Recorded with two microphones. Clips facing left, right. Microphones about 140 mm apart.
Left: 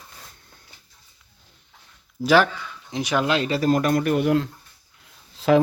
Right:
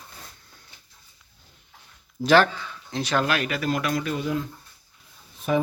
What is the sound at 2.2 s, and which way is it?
Speech, 10° left (ahead or behind).